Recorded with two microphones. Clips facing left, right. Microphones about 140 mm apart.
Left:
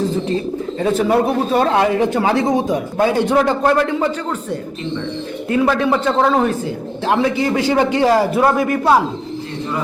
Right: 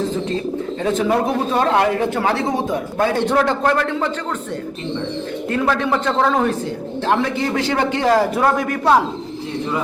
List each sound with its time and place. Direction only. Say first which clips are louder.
0.8 s a man's voice: left 3 dB; 10° left (ahead or behind)
5.5 s a man's voice: left 4 dB; 5° left (ahead or behind)